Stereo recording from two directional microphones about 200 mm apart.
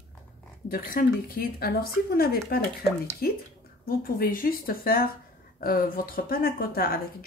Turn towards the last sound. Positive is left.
turn(degrees=45)  # may be behind; listen again after turning